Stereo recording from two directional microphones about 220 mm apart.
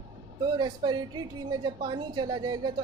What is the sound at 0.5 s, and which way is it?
A woman's voice, 20° right (ahead or behind).